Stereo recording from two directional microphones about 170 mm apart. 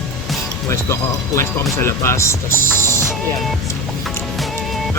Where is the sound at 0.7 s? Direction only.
15° left (ahead or behind).